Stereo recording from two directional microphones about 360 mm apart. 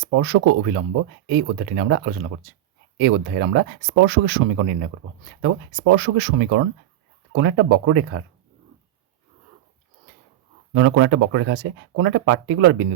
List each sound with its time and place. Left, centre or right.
0.0 s speech: right
3.0 s speech: right
10.8 s speech: right